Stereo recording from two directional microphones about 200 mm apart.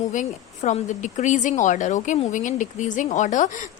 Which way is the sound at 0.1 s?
35° left (ahead or behind).